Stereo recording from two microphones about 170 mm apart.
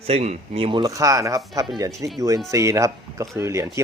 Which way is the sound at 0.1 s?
40° right (ahead or behind).